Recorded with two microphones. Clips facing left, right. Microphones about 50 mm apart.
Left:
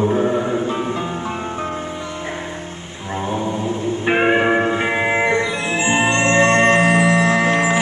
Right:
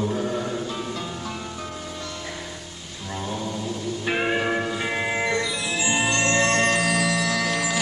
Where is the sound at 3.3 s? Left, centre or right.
Left.